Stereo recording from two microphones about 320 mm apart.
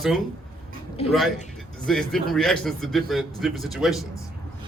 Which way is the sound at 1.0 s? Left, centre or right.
Centre.